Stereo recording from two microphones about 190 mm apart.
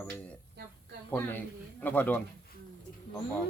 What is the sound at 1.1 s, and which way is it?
A man's voice, 10° left (ahead or behind).